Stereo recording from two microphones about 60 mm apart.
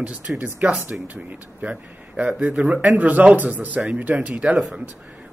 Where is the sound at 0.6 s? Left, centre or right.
Right.